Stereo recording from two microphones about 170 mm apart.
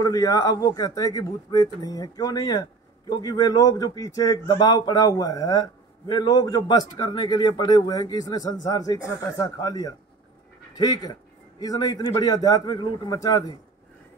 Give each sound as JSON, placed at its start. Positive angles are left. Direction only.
{"t": 0.0, "sound": "speech", "side_deg": 20}